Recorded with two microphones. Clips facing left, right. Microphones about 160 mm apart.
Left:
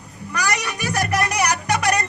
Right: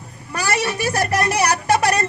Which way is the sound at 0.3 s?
25° right (ahead or behind).